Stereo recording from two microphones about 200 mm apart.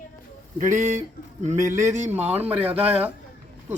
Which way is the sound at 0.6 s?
40° right (ahead or behind).